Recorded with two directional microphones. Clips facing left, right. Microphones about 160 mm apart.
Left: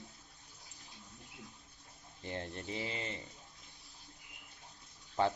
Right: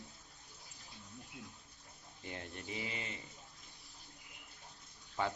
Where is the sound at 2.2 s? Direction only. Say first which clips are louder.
Left 4 dB; 30° left (ahead or behind).